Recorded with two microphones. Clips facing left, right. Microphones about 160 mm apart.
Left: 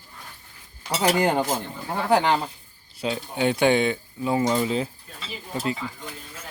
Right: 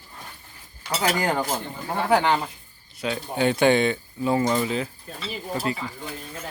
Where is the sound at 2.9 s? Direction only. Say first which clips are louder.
Left 1 dB; 30° left (ahead or behind).